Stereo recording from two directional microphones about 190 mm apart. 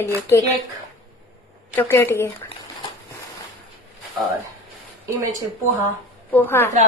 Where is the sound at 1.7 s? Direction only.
10° left (ahead or behind).